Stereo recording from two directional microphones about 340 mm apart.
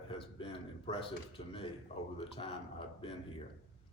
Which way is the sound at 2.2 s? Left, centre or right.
Centre.